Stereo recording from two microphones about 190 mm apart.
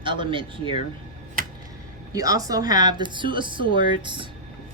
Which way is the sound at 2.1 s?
20° right (ahead or behind).